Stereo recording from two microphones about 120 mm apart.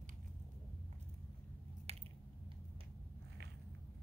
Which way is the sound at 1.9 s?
60° right (ahead or behind).